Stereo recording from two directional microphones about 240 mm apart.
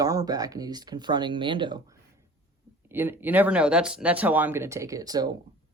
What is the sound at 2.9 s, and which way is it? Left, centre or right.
Speech, centre.